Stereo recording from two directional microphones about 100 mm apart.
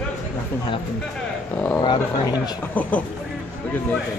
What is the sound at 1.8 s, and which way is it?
Speech, 40° left (ahead or behind).